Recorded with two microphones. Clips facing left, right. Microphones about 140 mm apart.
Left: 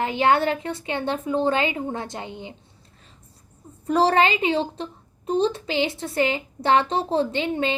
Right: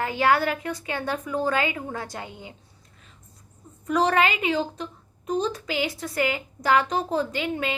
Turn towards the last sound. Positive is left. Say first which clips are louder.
# left 4 dB
turn(degrees=25)  # may be behind; listen again after turning